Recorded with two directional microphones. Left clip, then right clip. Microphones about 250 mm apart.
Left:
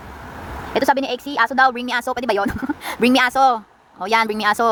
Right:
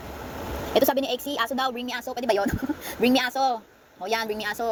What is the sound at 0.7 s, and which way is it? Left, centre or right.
A woman's voice, centre.